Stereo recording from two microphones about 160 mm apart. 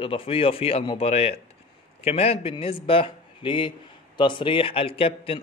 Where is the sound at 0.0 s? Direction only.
35° left (ahead or behind).